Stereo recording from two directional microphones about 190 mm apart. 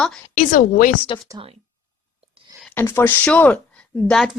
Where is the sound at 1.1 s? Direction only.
25° left (ahead or behind).